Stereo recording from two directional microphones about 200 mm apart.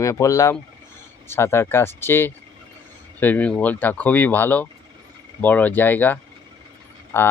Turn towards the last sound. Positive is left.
turn(degrees=10)  # may be behind; listen again after turning